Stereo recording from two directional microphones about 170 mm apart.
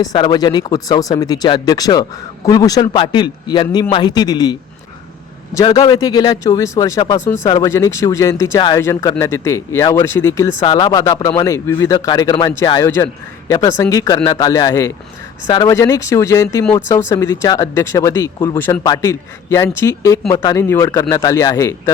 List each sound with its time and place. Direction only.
0.0 s speech: 25° left (ahead or behind)
5.6 s a man's voice: 25° left (ahead or behind)